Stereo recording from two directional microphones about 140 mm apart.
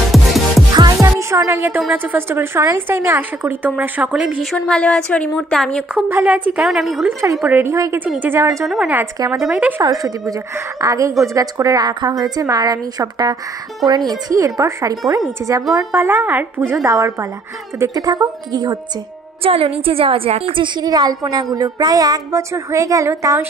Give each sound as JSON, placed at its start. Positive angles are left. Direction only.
{"t": 0.1, "sound": "music", "side_deg": 0}
{"t": 1.0, "sound": "music", "side_deg": -20}
{"t": 2.1, "sound": "a woman's voice", "side_deg": -15}
{"t": 5.9, "sound": "a woman's voice", "side_deg": -15}
{"t": 7.1, "sound": "a woman's voice", "side_deg": -20}
{"t": 8.4, "sound": "a woman's voice", "side_deg": -20}
{"t": 8.6, "sound": "a woman's voice", "side_deg": -5}
{"t": 9.8, "sound": "a woman's voice", "side_deg": -25}
{"t": 16.8, "sound": "a woman's voice", "side_deg": -25}
{"t": 19.4, "sound": "a woman's voice", "side_deg": -45}